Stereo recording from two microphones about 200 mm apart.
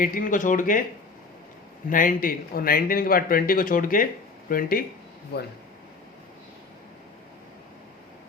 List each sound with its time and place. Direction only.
0.0 s speech: 45° left (ahead or behind)
1.9 s speech: 45° left (ahead or behind)